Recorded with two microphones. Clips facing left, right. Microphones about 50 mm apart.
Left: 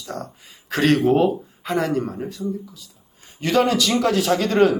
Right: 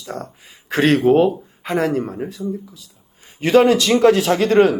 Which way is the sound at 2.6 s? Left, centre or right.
Centre.